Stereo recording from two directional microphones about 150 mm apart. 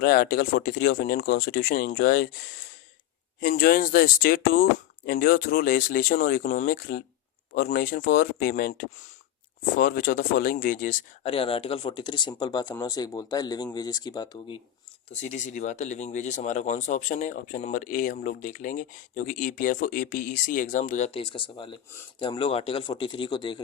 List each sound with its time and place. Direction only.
0.0 s speech: 80° left
3.4 s speech: 70° left (ahead or behind)
11.2 s speech: 40° left (ahead or behind)
15.1 s speech: 50° left (ahead or behind)
21.2 s speech: 35° left (ahead or behind)